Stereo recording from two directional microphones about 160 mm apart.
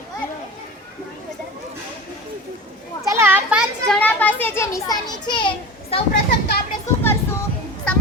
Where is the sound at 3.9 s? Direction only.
10° left (ahead or behind); by 6.0 s 35° left (ahead or behind).